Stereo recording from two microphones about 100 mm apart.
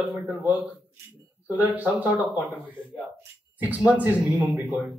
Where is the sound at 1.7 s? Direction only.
15° right (ahead or behind).